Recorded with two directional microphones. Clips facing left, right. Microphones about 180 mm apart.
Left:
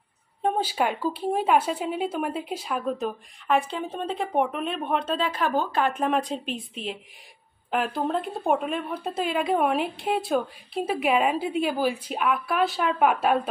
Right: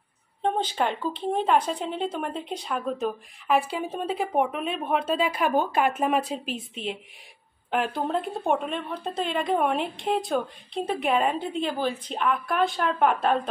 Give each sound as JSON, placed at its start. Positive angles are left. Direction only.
{"t": 0.4, "sound": "speech", "side_deg": 10}